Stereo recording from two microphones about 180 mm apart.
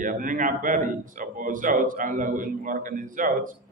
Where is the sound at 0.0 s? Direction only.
50° right (ahead or behind).